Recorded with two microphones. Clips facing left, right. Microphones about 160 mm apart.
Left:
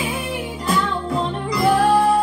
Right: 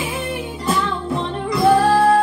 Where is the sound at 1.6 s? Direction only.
Centre (ahead or behind).